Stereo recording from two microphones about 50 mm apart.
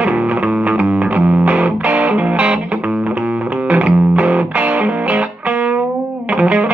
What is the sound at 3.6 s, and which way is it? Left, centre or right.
Music, right.